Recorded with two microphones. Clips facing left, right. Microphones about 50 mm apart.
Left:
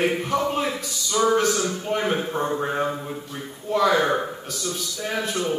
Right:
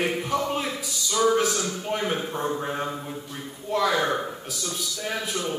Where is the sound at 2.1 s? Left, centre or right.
Centre.